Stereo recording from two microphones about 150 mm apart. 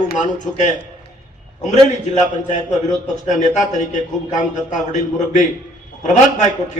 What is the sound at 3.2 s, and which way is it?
A man's voice, 55° left (ahead or behind).